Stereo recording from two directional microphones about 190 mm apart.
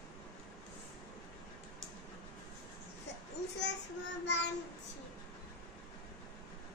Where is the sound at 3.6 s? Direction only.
65° left (ahead or behind).